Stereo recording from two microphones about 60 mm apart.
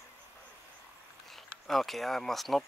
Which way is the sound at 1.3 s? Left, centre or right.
Centre.